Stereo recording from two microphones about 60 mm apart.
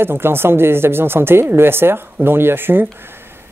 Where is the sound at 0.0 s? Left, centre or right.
Right.